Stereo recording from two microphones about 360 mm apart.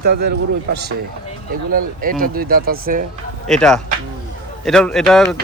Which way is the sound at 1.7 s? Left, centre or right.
Right.